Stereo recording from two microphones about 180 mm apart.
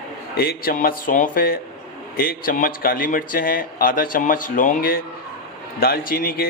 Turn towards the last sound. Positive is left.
turn(degrees=55)  # may be behind; listen again after turning